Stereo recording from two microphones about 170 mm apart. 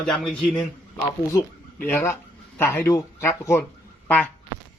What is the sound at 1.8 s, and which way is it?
Speech, 10° left (ahead or behind).